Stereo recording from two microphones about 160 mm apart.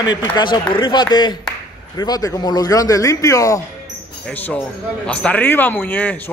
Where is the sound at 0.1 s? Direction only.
30° left (ahead or behind).